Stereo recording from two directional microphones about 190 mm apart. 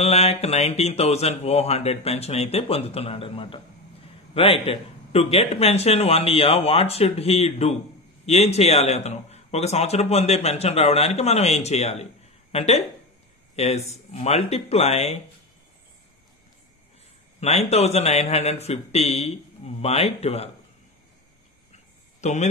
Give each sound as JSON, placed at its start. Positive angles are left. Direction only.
{"t": 0.0, "sound": "a man's voice", "side_deg": 30}
{"t": 17.4, "sound": "a man's voice", "side_deg": 35}
{"t": 22.2, "sound": "a man's voice", "side_deg": 40}